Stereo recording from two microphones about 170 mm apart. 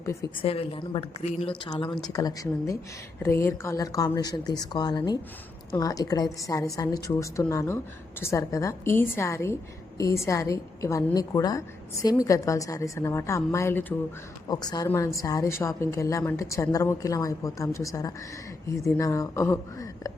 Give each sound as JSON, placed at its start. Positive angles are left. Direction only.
{"t": 0.0, "sound": "a woman's voice", "side_deg": 15}
{"t": 0.4, "sound": "a woman's voice", "side_deg": 35}